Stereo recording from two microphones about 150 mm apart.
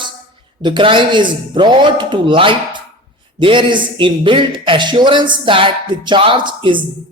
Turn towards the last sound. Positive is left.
turn(degrees=-35)  # may be behind; listen again after turning